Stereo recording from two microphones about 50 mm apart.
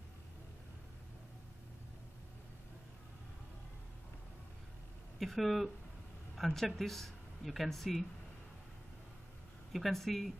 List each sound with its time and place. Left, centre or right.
5.2 s speech: centre
9.7 s speech: centre